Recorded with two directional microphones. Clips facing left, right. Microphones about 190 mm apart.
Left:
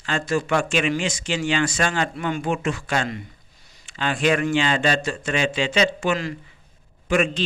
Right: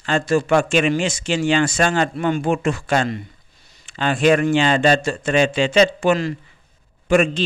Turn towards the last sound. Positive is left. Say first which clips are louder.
# right 5 dB
turn(degrees=-45)  # may be behind; listen again after turning